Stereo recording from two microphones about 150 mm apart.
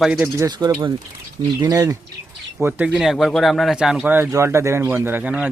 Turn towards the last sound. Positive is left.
turn(degrees=-10)  # may be behind; listen again after turning